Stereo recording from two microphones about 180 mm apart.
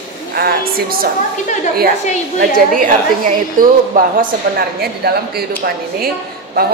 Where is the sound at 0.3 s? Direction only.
60° right (ahead or behind).